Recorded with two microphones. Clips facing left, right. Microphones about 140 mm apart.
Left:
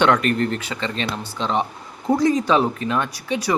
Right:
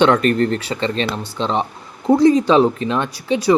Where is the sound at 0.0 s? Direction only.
30° right (ahead or behind).